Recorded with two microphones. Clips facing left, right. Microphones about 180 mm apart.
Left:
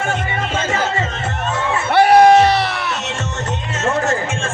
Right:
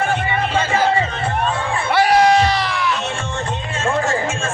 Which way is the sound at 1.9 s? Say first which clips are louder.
Left 4 dB; 55° left (ahead or behind).